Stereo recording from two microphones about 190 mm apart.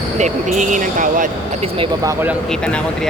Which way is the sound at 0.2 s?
40° right (ahead or behind).